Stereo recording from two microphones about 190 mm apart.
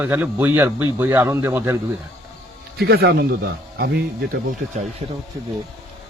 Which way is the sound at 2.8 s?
60° right (ahead or behind).